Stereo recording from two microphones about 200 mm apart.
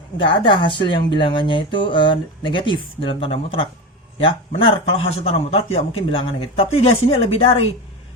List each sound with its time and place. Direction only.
0.2 s speech: 25° left (ahead or behind)